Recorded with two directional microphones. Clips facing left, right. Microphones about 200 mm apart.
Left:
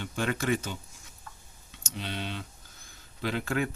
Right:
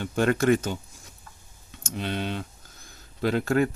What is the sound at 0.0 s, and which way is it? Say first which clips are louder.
Speech: right 8 dB; 45° right (ahead or behind).